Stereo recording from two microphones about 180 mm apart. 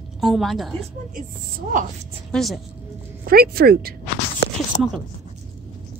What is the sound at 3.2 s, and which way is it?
Speech, 55° right (ahead or behind).